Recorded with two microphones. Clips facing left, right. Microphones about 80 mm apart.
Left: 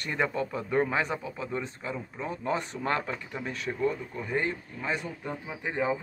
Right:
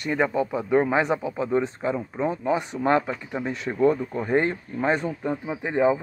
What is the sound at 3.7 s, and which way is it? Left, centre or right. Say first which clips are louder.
Speech: right 9 dB; right.